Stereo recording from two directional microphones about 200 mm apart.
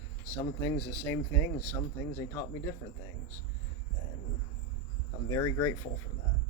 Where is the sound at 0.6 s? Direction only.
10° left (ahead or behind).